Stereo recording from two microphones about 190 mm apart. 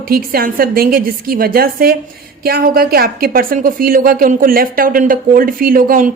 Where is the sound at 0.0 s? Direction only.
50° right (ahead or behind).